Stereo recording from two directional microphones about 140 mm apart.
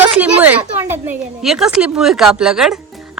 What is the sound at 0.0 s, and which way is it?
Speech, 10° right (ahead or behind).